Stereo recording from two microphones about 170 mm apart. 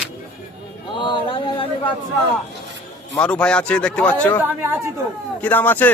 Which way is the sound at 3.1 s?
5° left (ahead or behind).